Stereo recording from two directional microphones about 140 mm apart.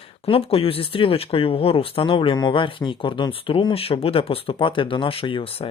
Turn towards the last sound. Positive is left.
turn(degrees=40)  # may be behind; listen again after turning